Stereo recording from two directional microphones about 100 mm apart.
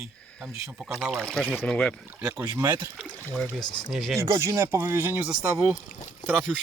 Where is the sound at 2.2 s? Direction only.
30° right (ahead or behind).